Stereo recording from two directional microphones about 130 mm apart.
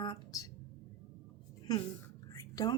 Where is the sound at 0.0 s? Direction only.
40° left (ahead or behind).